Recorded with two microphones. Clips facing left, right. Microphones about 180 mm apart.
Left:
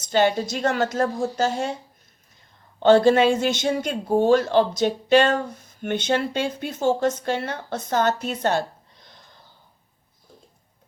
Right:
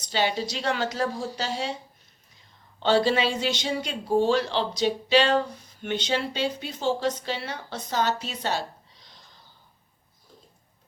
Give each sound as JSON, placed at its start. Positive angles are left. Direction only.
{"t": 0.0, "sound": "speech", "side_deg": 50}
{"t": 2.8, "sound": "speech", "side_deg": 50}